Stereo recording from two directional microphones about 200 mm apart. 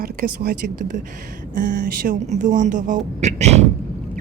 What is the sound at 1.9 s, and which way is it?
Speech, 45° right (ahead or behind).